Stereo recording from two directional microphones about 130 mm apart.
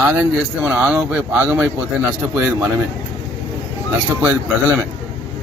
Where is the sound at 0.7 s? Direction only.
15° right (ahead or behind).